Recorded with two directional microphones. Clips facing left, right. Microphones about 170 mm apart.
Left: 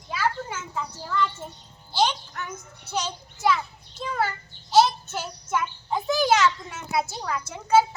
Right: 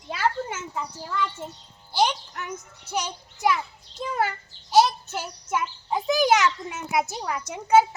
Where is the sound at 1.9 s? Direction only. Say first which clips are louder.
Right 1 dB; 15° right (ahead or behind).